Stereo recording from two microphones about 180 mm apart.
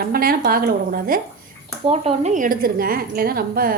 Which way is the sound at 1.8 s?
35° right (ahead or behind).